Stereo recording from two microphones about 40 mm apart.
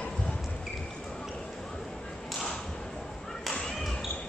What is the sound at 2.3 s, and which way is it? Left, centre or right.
Whip, centre.